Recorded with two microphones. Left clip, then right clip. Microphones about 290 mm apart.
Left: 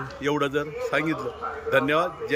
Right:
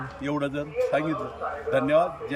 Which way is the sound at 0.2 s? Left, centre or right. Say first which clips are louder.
Left 4 dB; centre.